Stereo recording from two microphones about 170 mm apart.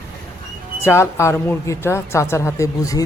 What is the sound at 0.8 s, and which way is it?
A woman's voice, 15° left (ahead or behind).